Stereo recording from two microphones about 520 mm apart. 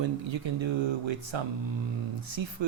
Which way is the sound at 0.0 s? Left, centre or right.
Right.